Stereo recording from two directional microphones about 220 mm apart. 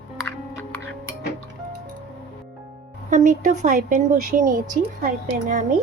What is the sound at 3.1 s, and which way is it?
Speech, 35° right (ahead or behind).